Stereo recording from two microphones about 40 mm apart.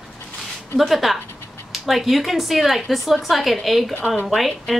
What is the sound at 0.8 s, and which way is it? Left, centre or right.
A woman's voice, centre.